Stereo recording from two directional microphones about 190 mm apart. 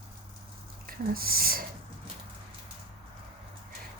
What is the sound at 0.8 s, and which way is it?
Speech, 50° right (ahead or behind).